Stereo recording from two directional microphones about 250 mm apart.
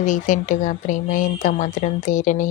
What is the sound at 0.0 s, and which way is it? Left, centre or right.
Speech, left.